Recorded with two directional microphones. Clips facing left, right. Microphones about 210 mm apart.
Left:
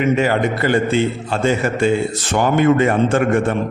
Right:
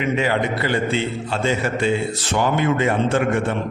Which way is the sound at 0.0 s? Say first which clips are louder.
Left 4 dB; 45° left (ahead or behind).